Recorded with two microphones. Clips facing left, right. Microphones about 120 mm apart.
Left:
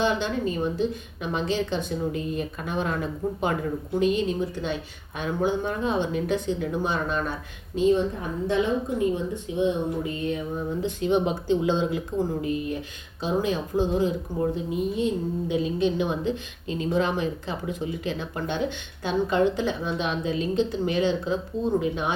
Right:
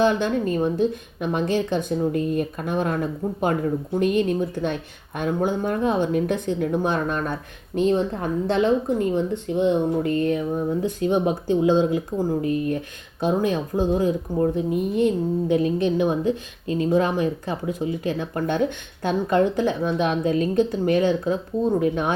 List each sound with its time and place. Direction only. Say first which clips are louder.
0.0 s a woman's voice: right 4 dB; 50° right (ahead or behind)
7.8 s a woman's voice: right 1 dB; 65° right (ahead or behind); by 12.7 s 40° right (ahead or behind)
13.1 s a woman's voice: right 4 dB; 50° right (ahead or behind)